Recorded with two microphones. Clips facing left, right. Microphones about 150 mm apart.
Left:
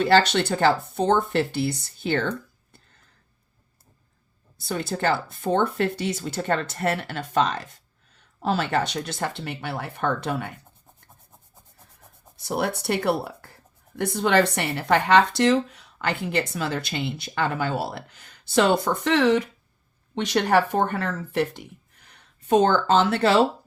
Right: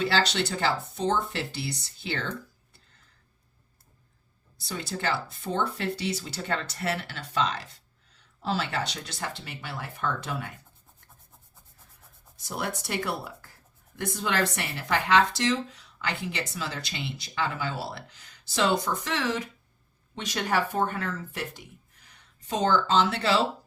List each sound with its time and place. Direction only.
0.0 s speech: 55° left (ahead or behind)
4.5 s speech: 55° left (ahead or behind)
12.5 s speech: 65° left (ahead or behind)
22.4 s speech: 55° left (ahead or behind)